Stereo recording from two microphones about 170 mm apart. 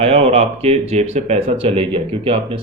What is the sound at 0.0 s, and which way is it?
Speech, 35° right (ahead or behind).